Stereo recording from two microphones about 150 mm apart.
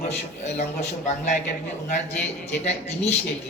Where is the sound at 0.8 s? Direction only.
50° left (ahead or behind).